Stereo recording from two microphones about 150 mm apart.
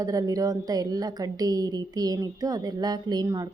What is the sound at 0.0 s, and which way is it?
A woman's voice, 25° right (ahead or behind).